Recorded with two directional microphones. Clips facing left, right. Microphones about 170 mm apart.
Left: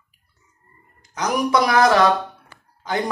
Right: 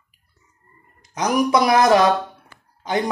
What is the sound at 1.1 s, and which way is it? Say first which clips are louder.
Speech: right 2 dB; 20° right (ahead or behind).